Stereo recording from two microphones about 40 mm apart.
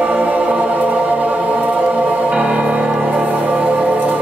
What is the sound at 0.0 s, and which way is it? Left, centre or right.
Music, right.